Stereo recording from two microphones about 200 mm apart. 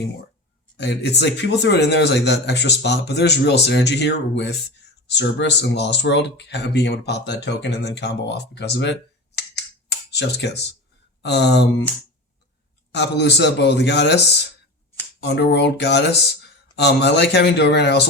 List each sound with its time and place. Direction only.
0.8 s speech: 60° left (ahead or behind)
12.9 s speech: 60° left (ahead or behind)